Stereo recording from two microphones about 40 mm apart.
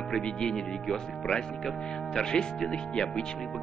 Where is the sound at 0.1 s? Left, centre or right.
Centre.